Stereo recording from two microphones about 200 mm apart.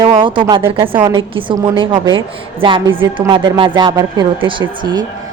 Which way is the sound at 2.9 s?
25° right (ahead or behind).